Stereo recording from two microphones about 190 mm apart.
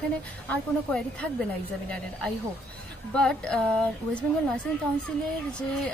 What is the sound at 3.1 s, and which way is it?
Speech, 5° left (ahead or behind).